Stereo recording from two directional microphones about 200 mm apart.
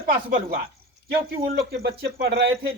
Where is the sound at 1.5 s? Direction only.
60° right (ahead or behind).